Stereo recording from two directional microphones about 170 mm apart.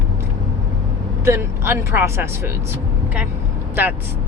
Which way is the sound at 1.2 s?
15° right (ahead or behind).